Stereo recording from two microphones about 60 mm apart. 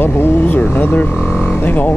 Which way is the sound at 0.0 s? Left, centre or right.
Left.